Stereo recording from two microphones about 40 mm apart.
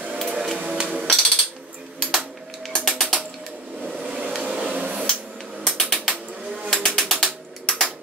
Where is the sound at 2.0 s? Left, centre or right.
Centre.